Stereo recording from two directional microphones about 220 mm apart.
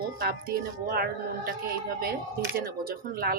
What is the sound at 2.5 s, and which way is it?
Speech, 40° right (ahead or behind).